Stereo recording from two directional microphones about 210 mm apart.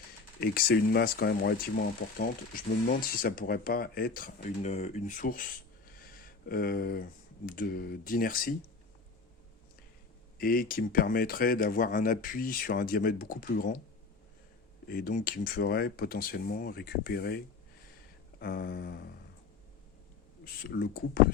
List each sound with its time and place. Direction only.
0.3 s speech: 50° left (ahead or behind)
10.3 s speech: 45° left (ahead or behind)
14.8 s speech: 45° left (ahead or behind)
20.4 s speech: 45° left (ahead or behind)